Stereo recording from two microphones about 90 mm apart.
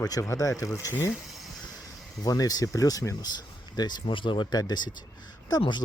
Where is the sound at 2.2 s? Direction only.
45° left (ahead or behind).